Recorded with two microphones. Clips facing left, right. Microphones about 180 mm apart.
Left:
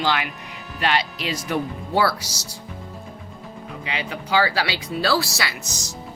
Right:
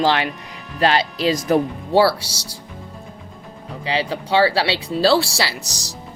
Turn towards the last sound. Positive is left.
turn(degrees=-35)  # may be behind; listen again after turning